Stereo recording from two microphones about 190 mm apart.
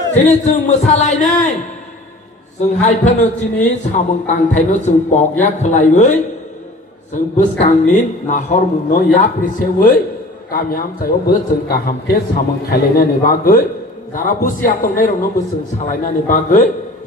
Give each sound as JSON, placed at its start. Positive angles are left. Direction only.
{"t": 0.1, "sound": "a man's voice", "side_deg": 35}
{"t": 2.6, "sound": "a man's voice", "side_deg": 40}
{"t": 7.6, "sound": "a man's voice", "side_deg": 40}